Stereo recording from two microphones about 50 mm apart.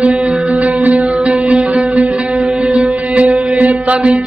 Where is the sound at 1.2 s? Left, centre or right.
Centre.